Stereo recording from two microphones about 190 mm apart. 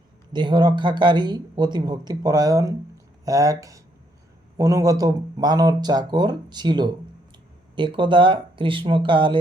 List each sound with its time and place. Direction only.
0.3 s speech: 25° right (ahead or behind)